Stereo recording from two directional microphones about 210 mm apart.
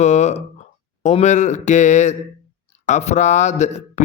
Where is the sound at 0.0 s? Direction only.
35° left (ahead or behind).